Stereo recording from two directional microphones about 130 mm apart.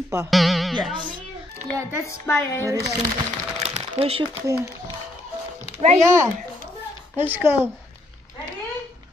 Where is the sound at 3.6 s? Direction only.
50° right (ahead or behind).